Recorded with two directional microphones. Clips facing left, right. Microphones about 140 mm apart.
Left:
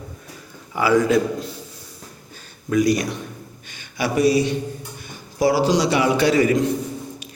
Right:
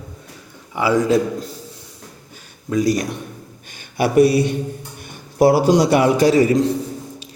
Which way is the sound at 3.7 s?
50° right (ahead or behind).